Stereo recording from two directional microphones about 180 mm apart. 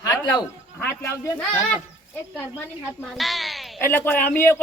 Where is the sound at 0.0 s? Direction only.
20° left (ahead or behind).